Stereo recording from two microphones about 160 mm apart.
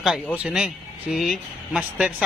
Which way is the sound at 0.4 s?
5° right (ahead or behind).